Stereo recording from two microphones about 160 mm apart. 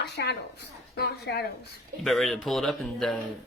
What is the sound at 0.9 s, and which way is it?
Speech, 90° left.